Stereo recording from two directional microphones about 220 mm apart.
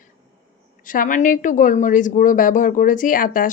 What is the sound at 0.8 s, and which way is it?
Speech, 40° left (ahead or behind).